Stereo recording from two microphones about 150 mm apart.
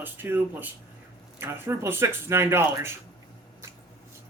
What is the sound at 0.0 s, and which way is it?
Speech, 15° right (ahead or behind).